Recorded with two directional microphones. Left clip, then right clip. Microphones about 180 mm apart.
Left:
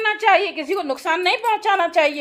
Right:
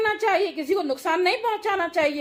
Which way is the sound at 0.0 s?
25° left (ahead or behind).